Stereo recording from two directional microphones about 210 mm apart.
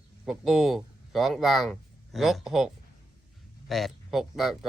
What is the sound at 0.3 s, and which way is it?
Speech, centre (ahead or behind).